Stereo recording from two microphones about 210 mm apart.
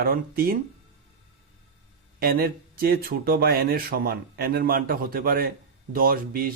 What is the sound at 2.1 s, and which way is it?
Speech, 45° right (ahead or behind).